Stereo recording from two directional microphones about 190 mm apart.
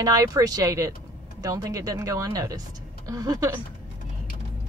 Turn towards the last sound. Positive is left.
turn(degrees=-20)  # may be behind; listen again after turning